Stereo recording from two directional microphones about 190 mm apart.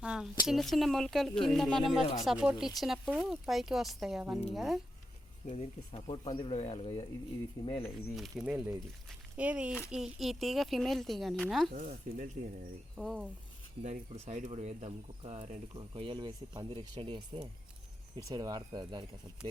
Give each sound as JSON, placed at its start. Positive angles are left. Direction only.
{"t": 0.0, "sound": "a sound", "side_deg": -5}
{"t": 0.4, "sound": "speech", "side_deg": 0}
{"t": 5.5, "sound": "speech", "side_deg": 30}
{"t": 8.1, "sound": "speech", "side_deg": 0}
{"t": 11.7, "sound": "speech", "side_deg": -50}
{"t": 13.0, "sound": "speech", "side_deg": 0}
{"t": 13.8, "sound": "speech", "side_deg": -40}